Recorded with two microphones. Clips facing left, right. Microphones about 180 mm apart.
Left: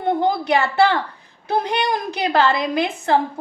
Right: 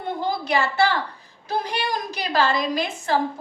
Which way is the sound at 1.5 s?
60° left (ahead or behind).